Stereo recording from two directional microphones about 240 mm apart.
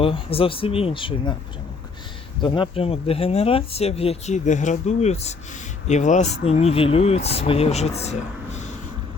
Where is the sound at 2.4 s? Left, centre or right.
Left.